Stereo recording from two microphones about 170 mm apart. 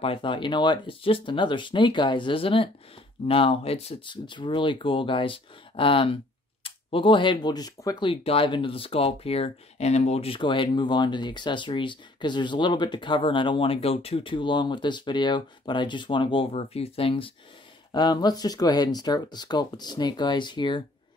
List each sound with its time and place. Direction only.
0.0 s speech: 30° left (ahead or behind)